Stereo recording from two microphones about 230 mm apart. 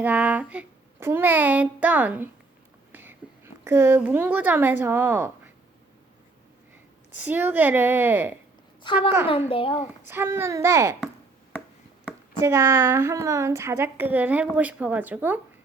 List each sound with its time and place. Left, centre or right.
0.0 s a woman's voice: centre
7.2 s a woman's voice: centre
8.9 s a child's voice: left
10.1 s a woman's voice: centre
12.0 s a woman's voice: centre